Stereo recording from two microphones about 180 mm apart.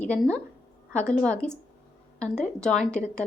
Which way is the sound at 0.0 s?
5° left (ahead or behind).